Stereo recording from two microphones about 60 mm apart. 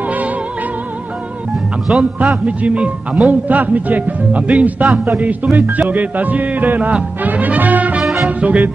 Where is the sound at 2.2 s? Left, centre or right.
Right.